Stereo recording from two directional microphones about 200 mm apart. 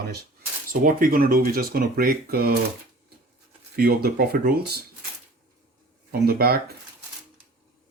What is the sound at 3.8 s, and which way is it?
Speech, 50° right (ahead or behind).